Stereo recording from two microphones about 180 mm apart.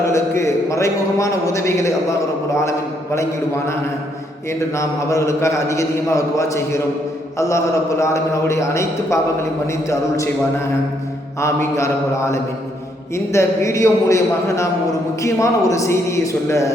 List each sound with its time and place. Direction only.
0.0 s a man's voice: 15° left (ahead or behind)
3.2 s a man's voice: 15° left (ahead or behind)
11.3 s a man's voice: 15° left (ahead or behind)